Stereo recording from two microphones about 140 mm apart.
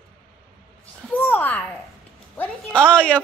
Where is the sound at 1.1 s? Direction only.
10° left (ahead or behind).